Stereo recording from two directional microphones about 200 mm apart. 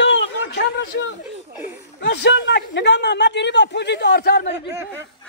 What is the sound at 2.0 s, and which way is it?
A man's voice, 60° left (ahead or behind).